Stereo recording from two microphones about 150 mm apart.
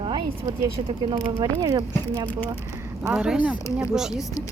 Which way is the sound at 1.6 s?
25° right (ahead or behind).